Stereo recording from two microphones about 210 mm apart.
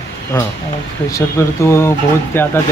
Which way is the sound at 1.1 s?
15° left (ahead or behind).